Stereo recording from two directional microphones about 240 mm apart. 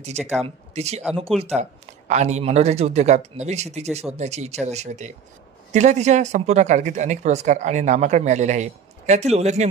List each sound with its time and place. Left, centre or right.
0.4 s speech: right